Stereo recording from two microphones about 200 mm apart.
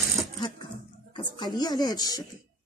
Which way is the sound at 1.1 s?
25° left (ahead or behind).